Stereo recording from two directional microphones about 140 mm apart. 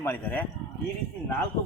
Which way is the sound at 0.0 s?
15° left (ahead or behind).